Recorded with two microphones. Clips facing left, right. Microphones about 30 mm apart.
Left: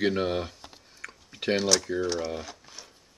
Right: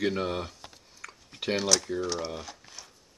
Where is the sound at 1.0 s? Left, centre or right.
Centre.